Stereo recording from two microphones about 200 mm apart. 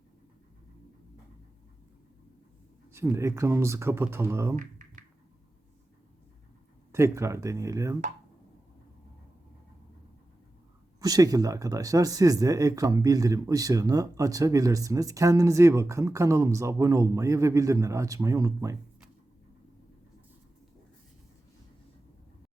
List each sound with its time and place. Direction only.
2.9 s speech: 10° right (ahead or behind)
4.5 s computer keyboard: 40° right (ahead or behind)
6.9 s speech: 15° right (ahead or behind)
11.0 s speech: 20° right (ahead or behind)